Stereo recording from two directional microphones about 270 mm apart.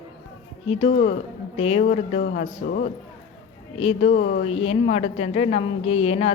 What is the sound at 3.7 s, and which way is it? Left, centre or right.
A woman's voice, left.